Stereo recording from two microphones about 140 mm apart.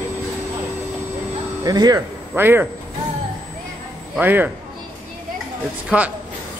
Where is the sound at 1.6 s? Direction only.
30° right (ahead or behind).